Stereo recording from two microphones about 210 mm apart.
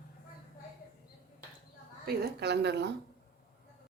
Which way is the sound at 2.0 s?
50° right (ahead or behind).